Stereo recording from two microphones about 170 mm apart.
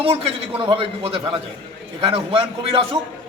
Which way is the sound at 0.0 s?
35° right (ahead or behind).